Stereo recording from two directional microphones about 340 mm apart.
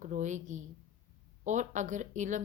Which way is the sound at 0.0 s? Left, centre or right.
Right.